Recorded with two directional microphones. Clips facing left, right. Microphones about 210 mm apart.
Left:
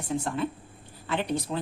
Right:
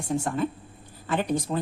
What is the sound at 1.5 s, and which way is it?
Speech, 40° right (ahead or behind).